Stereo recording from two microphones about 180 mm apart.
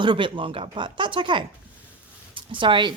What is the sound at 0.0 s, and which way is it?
Speech, 25° right (ahead or behind).